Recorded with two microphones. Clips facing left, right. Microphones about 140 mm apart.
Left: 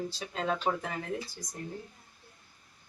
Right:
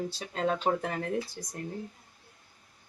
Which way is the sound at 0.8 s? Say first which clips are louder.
Right 4 dB; 65° right (ahead or behind).